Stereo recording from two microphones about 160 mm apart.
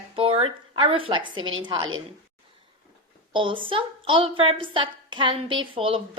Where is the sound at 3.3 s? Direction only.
30° right (ahead or behind).